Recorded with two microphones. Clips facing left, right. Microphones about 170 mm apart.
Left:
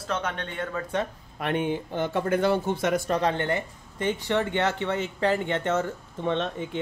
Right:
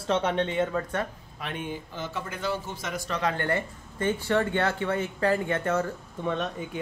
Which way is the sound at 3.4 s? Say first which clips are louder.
Even; 20° left (ahead or behind).